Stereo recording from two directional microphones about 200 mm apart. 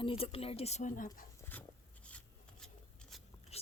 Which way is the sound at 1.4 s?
10° left (ahead or behind).